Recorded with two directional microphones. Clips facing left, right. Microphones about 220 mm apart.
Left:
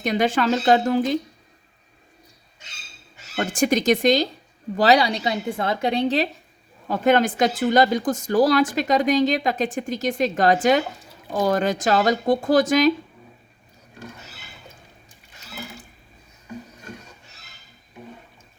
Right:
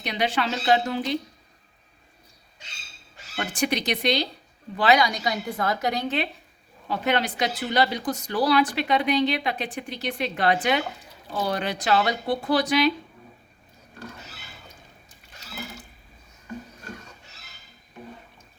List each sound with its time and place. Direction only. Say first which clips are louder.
0.0 s a woman's voice: left 6 dB; 45° left (ahead or behind)
3.3 s a woman's voice: left 5 dB; 45° left (ahead or behind)
4.8 s a woman's voice: left 3 dB; 35° left (ahead or behind)
6.8 s a woman's voice: left 7 dB; 45° left (ahead or behind)